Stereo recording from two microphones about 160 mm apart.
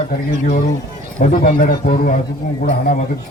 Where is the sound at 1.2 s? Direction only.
55° left (ahead or behind).